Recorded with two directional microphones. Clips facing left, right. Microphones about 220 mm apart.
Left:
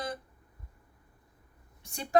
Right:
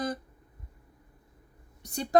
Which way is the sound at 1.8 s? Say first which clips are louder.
Right 3 dB; 35° right (ahead or behind).